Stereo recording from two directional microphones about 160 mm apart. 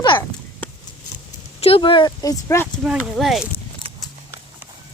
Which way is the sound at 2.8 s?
5° right (ahead or behind).